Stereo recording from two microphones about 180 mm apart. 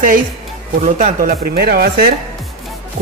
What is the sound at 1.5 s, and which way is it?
Speech, 60° right (ahead or behind).